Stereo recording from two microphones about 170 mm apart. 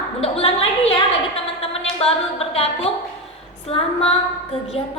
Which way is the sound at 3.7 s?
35° left (ahead or behind).